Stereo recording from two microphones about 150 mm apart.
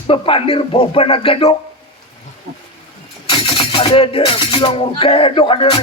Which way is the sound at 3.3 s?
35° left (ahead or behind).